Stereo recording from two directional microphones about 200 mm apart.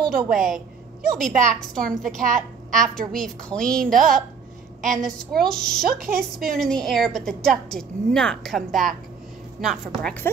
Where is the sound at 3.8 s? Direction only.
45° right (ahead or behind).